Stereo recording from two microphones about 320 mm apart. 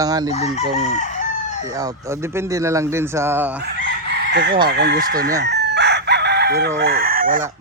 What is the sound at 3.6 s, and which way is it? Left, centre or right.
Chicken, right.